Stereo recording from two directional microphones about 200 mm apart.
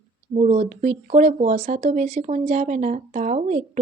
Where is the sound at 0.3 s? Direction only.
35° right (ahead or behind).